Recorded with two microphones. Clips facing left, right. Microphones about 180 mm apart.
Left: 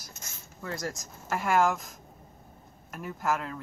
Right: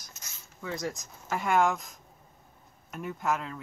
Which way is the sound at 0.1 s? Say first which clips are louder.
Left 4 dB; 50° left (ahead or behind).